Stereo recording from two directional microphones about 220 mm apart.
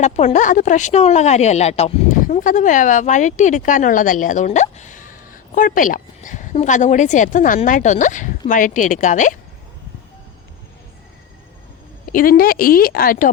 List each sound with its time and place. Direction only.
0.0 s speech: 30° left (ahead or behind)
12.0 s speech: 40° left (ahead or behind)